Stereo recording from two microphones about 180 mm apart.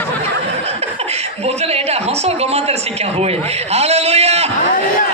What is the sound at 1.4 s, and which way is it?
A man's voice, 35° right (ahead or behind).